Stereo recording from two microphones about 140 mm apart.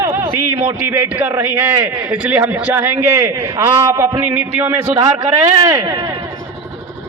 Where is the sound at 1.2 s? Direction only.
15° right (ahead or behind).